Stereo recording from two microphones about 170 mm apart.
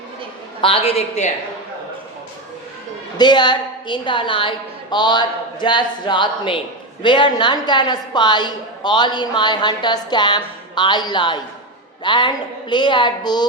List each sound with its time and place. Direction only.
0.6 s a man's voice: 30° left (ahead or behind)
3.2 s a woman's voice: 25° left (ahead or behind)